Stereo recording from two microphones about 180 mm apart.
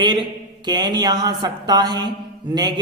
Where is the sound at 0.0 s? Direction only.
25° right (ahead or behind).